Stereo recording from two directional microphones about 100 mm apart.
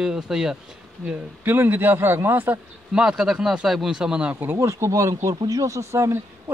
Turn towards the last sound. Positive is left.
turn(degrees=-30)  # may be behind; listen again after turning